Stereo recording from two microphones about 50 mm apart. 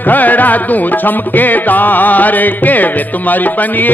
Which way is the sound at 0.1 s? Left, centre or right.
Left.